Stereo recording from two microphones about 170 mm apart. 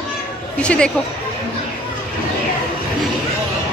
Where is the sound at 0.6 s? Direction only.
5° left (ahead or behind).